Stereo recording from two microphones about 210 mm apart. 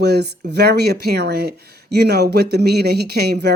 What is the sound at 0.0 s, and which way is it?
Speech, 50° right (ahead or behind).